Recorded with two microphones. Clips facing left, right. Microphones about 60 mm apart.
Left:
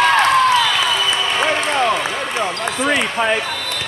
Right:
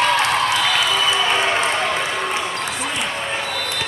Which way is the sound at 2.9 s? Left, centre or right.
Left.